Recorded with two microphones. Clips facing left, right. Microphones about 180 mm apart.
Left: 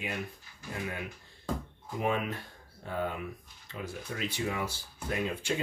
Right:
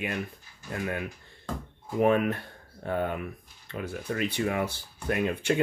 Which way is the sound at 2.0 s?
55° right (ahead or behind).